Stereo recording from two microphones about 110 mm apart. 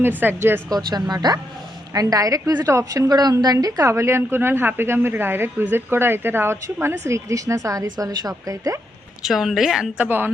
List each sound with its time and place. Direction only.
0.0 s speech: 20° right (ahead or behind)
0.7 s a woman's voice: 40° right (ahead or behind)
9.2 s a woman's voice: 5° right (ahead or behind)
10.1 s a woman's voice: 20° right (ahead or behind)